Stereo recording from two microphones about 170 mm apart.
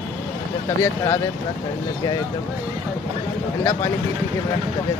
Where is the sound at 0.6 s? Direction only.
15° left (ahead or behind).